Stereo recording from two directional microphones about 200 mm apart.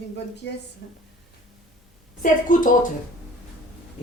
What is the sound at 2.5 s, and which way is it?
Speech, 40° left (ahead or behind).